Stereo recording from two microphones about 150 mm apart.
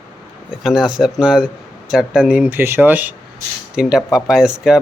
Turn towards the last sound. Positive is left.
turn(degrees=-5)  # may be behind; listen again after turning